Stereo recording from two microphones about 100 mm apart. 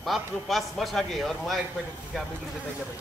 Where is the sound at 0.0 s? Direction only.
Centre (ahead or behind).